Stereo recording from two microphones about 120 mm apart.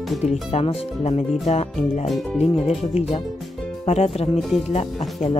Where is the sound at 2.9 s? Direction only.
55° left (ahead or behind).